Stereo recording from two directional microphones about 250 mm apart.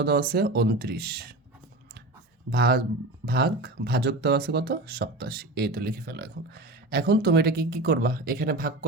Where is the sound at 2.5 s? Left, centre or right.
Right.